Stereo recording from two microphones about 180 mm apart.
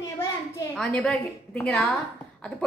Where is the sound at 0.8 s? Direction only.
5° left (ahead or behind).